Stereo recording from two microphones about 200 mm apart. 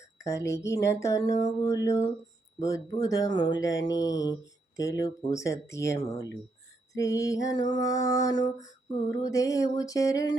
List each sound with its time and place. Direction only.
0.3 s speech: 15° left (ahead or behind)
3.8 s mantra: 20° left (ahead or behind)
4.8 s speech: 15° left (ahead or behind)